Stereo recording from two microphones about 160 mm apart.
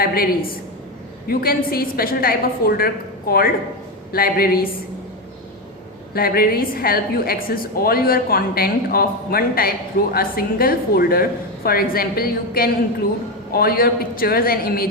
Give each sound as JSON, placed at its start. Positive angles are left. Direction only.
{"t": 0.0, "sound": "a woman's voice", "side_deg": 70}
{"t": 1.3, "sound": "a woman's voice", "side_deg": 70}
{"t": 6.1, "sound": "a woman's voice", "side_deg": 70}